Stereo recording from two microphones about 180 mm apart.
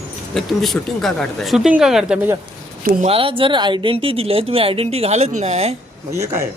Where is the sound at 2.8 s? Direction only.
35° right (ahead or behind).